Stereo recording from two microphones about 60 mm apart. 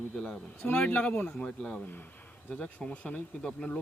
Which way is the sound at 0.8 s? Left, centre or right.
Left.